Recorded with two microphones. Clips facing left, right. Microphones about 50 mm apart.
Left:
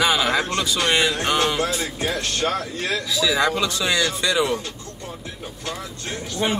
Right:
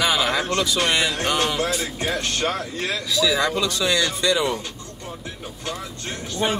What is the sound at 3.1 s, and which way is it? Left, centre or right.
Speech, centre.